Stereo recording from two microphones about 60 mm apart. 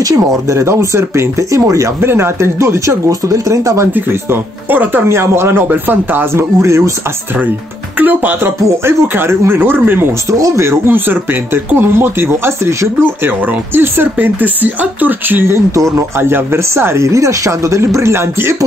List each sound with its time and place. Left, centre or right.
0.0 s speech: right
1.6 s speech: right
2.0 s speech: right
3.1 s speech: right
3.9 s speech: right
6.3 s speech: right
8.0 s speech: right
10.3 s speech: right
10.9 s speech: right
13.5 s speech: right
15.5 s speech: right
16.2 s speech: right